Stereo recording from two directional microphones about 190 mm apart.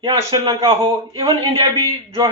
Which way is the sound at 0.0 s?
20° right (ahead or behind).